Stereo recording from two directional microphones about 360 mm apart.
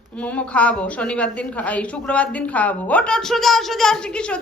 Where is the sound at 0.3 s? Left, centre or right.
Centre.